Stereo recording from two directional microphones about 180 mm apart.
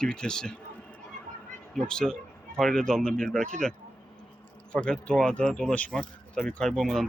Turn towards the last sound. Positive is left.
turn(degrees=0)  # may be behind; listen again after turning